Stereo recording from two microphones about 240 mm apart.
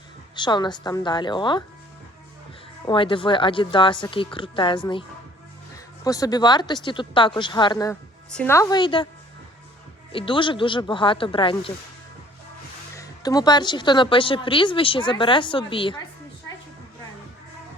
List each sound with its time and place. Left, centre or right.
0.3 s speech: centre
2.8 s speech: left
6.1 s speech: centre
10.1 s speech: left
13.0 s speech: centre